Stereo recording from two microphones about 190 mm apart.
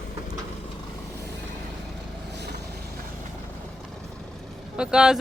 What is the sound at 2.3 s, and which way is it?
Vehicle, 60° right (ahead or behind).